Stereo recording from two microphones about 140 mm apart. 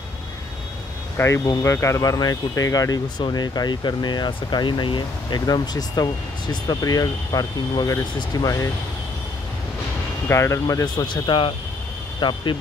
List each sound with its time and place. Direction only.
1.1 s speech: 20° left (ahead or behind)
10.2 s speech: 20° left (ahead or behind)